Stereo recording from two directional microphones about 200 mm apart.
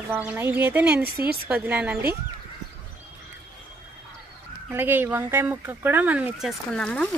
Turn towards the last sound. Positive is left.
turn(degrees=5)  # may be behind; listen again after turning